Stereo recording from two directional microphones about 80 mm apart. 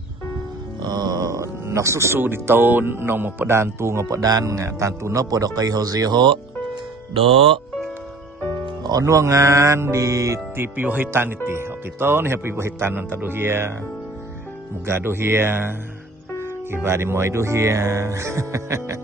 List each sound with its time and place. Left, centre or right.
0.8 s speech: right
4.2 s speech: right
9.0 s music: right
14.9 s speech: right
16.7 s music: right